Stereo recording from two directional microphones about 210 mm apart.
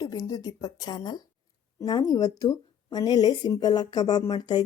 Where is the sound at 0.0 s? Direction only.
15° left (ahead or behind).